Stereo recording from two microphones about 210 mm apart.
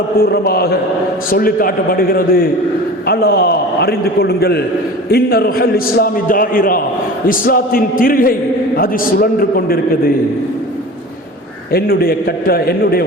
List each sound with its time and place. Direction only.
0.2 s a man's voice: 50° left (ahead or behind)
11.7 s a man's voice: 45° left (ahead or behind)